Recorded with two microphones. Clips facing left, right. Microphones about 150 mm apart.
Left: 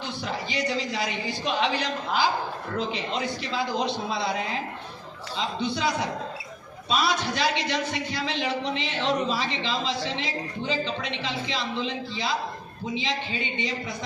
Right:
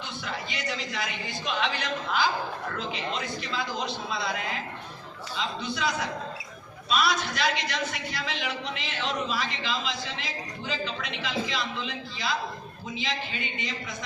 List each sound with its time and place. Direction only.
0.3 s a woman's voice: 30° left (ahead or behind)
3.8 s a man's voice: 30° left (ahead or behind)
5.4 s a woman's voice: 30° left (ahead or behind)